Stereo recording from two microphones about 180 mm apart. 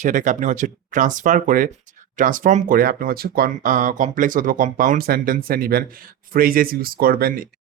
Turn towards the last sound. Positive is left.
turn(degrees=-55)  # may be behind; listen again after turning